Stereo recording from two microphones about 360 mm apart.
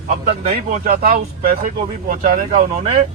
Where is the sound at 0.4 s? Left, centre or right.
Right.